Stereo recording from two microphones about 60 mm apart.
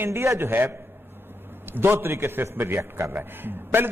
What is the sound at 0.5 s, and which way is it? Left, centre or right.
A man's voice, right.